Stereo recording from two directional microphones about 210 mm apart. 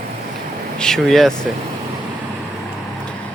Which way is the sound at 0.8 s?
Centre (ahead or behind).